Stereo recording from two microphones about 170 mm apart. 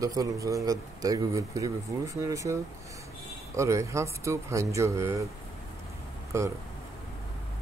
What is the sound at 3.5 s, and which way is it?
Speech, 15° right (ahead or behind).